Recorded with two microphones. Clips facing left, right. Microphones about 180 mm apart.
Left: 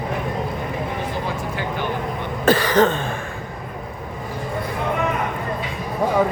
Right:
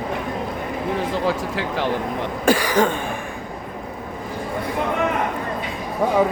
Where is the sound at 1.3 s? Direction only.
90° right.